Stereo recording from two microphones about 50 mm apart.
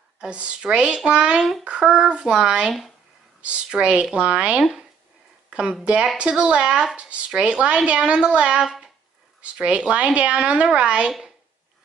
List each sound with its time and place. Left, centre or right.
0.2 s a woman's voice: right